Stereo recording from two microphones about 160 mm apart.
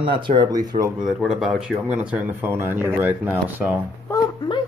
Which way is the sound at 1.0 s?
Centre (ahead or behind).